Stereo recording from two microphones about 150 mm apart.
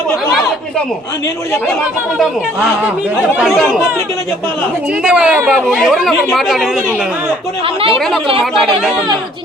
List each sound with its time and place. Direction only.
3.3 s speech: centre (ahead or behind)
5.0 s speech: 10° right (ahead or behind)
8.5 s speech: centre (ahead or behind)